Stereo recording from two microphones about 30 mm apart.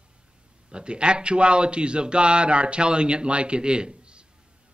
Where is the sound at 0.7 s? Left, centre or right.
Right.